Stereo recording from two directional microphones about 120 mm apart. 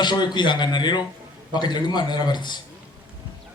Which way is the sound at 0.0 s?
40° left (ahead or behind).